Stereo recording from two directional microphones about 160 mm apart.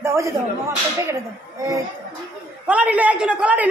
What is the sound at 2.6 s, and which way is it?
A man's voice, 10° right (ahead or behind).